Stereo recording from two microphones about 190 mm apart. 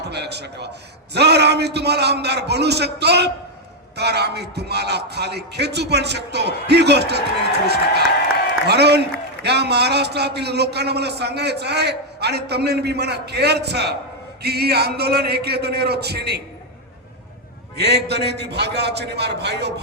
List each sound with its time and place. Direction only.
0.0 s a man's voice: 60° right (ahead or behind)
8.6 s a man's voice: 60° right (ahead or behind)
17.7 s a man's voice: 60° right (ahead or behind)